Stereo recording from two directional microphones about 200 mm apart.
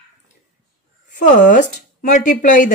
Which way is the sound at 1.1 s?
40° left (ahead or behind).